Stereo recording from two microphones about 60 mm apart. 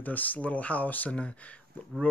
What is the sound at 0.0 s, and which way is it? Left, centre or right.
Speech, left.